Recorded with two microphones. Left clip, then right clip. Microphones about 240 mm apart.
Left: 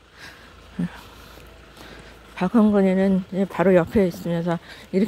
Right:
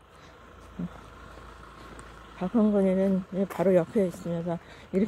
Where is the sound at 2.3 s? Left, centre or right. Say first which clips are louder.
Left 6 dB; left.